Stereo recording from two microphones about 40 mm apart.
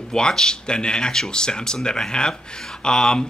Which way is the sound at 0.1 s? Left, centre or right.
Centre.